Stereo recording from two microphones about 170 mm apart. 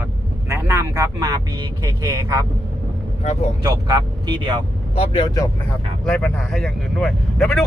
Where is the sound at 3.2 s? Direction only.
40° left (ahead or behind).